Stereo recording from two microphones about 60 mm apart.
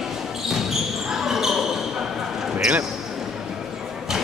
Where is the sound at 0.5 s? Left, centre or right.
Centre.